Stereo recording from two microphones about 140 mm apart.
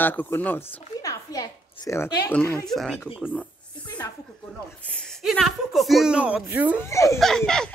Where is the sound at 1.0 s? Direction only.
25° left (ahead or behind).